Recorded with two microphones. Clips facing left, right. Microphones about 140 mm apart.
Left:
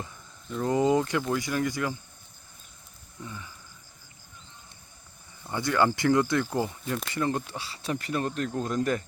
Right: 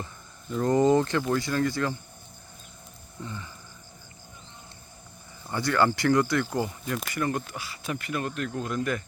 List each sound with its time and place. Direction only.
0.5 s speech: 5° left (ahead or behind)
3.2 s speech: 5° left (ahead or behind)
5.5 s speech: 15° left (ahead or behind); by 9.0 s 35° left (ahead or behind)